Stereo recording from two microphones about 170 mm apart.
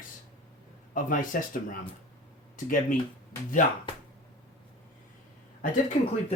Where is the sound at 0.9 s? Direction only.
55° left (ahead or behind).